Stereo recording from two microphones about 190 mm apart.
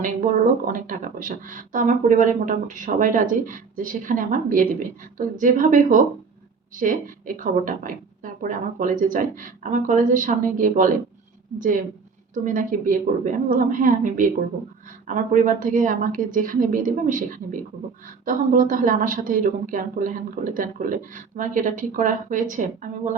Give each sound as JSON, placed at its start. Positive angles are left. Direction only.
{"t": 0.0, "sound": "speech", "side_deg": -45}
{"t": 12.3, "sound": "speech", "side_deg": -45}